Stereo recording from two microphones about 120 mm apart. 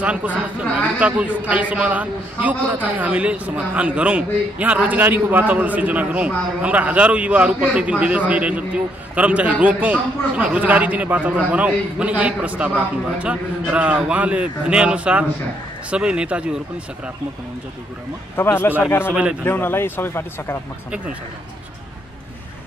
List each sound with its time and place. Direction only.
0.0 s a man's voice: 10° right (ahead or behind)
18.3 s speech: 20° left (ahead or behind)
19.0 s a man's voice: 10° right (ahead or behind)
19.4 s speech: 20° left (ahead or behind)